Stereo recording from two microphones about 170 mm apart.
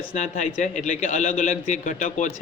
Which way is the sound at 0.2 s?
45° left (ahead or behind).